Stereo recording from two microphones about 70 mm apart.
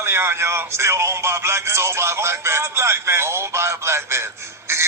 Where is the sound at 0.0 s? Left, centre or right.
Right.